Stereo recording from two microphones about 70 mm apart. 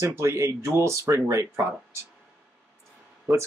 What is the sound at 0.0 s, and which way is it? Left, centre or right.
Speech, right.